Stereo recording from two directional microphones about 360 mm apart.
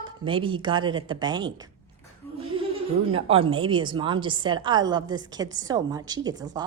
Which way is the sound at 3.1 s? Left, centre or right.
Centre.